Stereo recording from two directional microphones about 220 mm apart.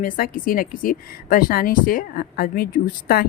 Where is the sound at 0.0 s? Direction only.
40° left (ahead or behind).